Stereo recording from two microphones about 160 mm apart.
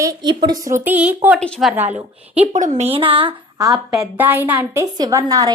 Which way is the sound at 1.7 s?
10° right (ahead or behind).